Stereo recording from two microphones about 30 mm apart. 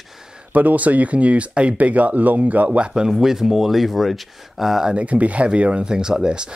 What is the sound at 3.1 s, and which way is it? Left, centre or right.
Speech, centre.